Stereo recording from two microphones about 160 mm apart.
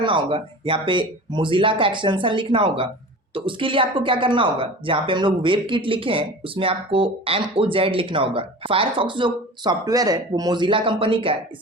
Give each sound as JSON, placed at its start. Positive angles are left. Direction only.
{"t": 0.0, "sound": "a woman's voice", "side_deg": -35}